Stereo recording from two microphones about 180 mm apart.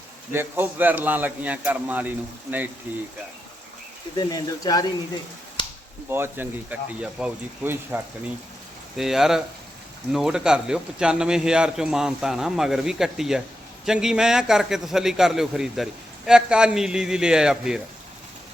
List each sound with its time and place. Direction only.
0.3 s a man's voice: 10° right (ahead or behind)
4.2 s speech: 20° left (ahead or behind)
6.1 s a man's voice: 10° right (ahead or behind)